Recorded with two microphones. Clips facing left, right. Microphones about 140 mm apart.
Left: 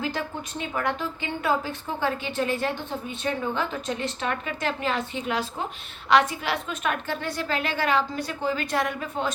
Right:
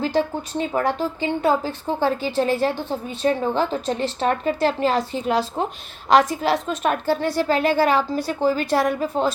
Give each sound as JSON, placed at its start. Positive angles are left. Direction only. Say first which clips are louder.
{"t": 0.0, "sound": "a woman's voice", "louder": "right 8 dB", "side_deg": -30}